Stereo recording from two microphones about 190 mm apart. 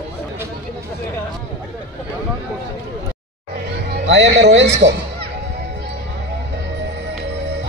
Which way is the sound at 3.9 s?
70° right (ahead or behind).